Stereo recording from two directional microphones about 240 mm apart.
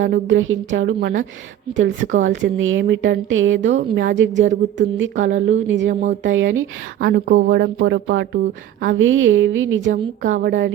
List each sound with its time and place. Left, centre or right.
0.0 s a woman's voice: right
5.9 s a woman's voice: right
6.2 s a woman's voice: right
9.9 s a woman's voice: right